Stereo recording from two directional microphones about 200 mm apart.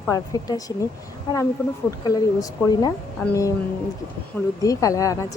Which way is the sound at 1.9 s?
15° left (ahead or behind).